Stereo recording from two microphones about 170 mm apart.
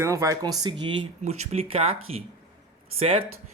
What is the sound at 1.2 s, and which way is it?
Speech, 40° right (ahead or behind).